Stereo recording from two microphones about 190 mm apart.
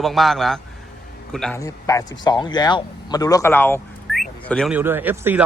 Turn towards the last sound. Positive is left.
turn(degrees=-10)  # may be behind; listen again after turning